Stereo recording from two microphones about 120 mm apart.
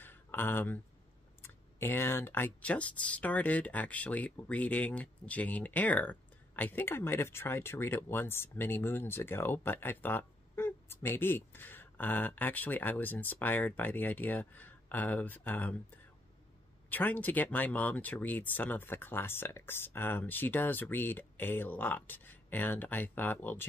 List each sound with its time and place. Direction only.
0.0 s a sound: 15° left (ahead or behind)
1.4 s speech: 20° left (ahead or behind)
16.9 s speech: 15° left (ahead or behind)